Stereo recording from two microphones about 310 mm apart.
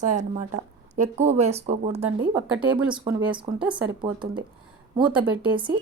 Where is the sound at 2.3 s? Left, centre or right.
Centre.